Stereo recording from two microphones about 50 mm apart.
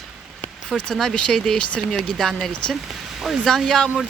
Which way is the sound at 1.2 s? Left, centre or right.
Centre.